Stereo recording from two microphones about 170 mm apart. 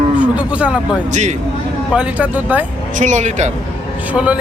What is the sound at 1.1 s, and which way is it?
Speech, 45° right (ahead or behind).